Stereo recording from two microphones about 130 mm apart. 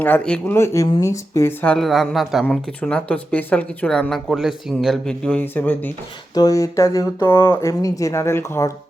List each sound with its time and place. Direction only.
0.0 s a man's voice: 10° left (ahead or behind)
0.5 s speech: 20° left (ahead or behind)
1.6 s a man's voice: 5° left (ahead or behind)
6.3 s speech: 30° left (ahead or behind)